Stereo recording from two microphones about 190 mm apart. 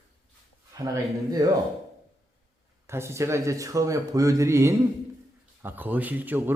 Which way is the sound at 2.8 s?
15° right (ahead or behind).